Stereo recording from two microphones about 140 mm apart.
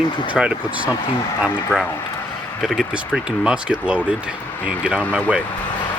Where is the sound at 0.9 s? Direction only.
25° left (ahead or behind).